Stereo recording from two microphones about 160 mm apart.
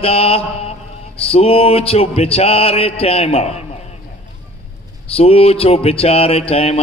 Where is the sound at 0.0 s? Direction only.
40° left (ahead or behind).